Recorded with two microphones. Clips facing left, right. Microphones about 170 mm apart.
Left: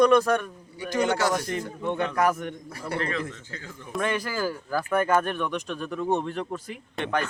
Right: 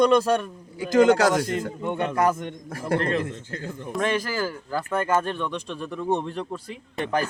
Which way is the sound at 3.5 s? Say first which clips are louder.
Right 7 dB; 55° right (ahead or behind).